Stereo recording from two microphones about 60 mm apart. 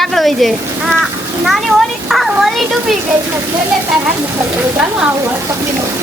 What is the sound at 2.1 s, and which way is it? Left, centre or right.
Speech, centre.